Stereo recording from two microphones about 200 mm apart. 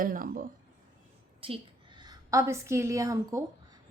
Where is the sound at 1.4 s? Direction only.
25° right (ahead or behind).